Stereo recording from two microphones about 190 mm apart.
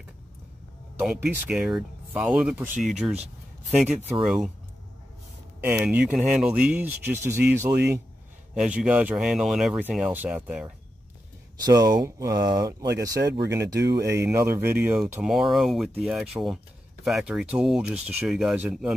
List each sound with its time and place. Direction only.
0.9 s speech: 5° right (ahead or behind)
5.6 s speech: 10° right (ahead or behind)
7.7 s speech: 60° right (ahead or behind)
8.5 s speech: 5° right (ahead or behind)
11.6 s speech: 20° right (ahead or behind)
13.2 s speech: 65° right (ahead or behind)
13.5 s speech: 15° right (ahead or behind)
13.7 s speech: 60° right (ahead or behind)
14.1 s speech: 15° right (ahead or behind)